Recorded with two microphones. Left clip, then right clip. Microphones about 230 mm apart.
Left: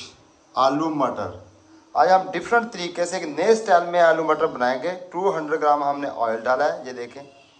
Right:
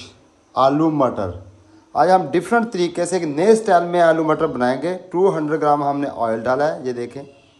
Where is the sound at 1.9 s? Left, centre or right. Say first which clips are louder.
Right 2 dB; right.